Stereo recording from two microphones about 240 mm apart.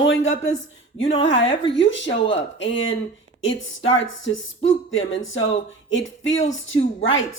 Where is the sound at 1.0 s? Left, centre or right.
Left.